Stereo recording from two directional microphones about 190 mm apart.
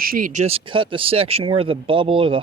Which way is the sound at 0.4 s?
30° right (ahead or behind).